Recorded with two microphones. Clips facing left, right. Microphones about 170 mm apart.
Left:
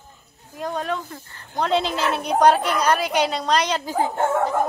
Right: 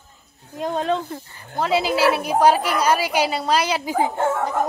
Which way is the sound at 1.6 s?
5° right (ahead or behind).